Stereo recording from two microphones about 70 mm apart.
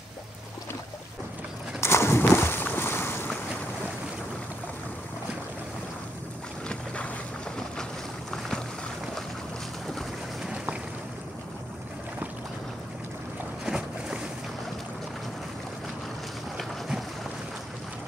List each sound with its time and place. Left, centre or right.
1.8 s a sound: left
8.3 s boat: centre
10.4 s boat: centre
13.7 s boat: centre